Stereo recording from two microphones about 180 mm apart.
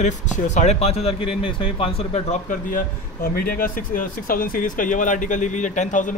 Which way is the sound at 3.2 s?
55° left (ahead or behind).